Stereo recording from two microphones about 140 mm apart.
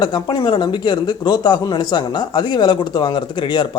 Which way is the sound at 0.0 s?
30° left (ahead or behind).